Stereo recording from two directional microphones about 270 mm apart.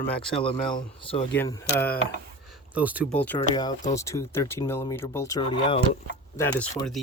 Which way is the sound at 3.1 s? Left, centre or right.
Centre.